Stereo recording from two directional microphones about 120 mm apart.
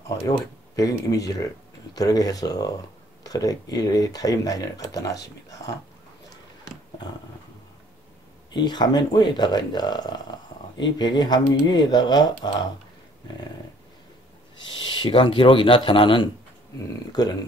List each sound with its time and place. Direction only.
0.7 s speech: 30° left (ahead or behind)
8.5 s speech: 40° left (ahead or behind)
14.9 s speech: 45° left (ahead or behind)